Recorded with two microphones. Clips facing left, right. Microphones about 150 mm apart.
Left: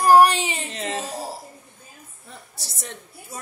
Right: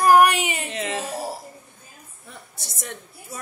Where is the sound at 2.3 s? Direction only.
35° left (ahead or behind).